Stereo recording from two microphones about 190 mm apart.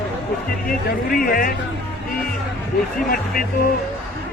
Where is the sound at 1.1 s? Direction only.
50° left (ahead or behind).